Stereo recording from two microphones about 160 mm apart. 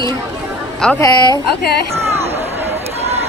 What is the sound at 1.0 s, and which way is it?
Speech, 25° left (ahead or behind).